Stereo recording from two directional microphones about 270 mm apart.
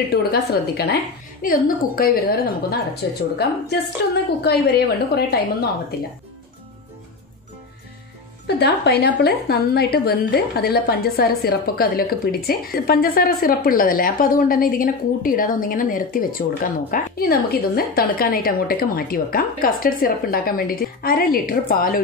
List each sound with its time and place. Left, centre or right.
0.1 s a woman's voice: left
8.5 s a woman's voice: left